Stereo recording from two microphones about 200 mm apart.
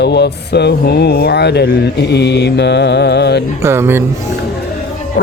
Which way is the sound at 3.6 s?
10° right (ahead or behind).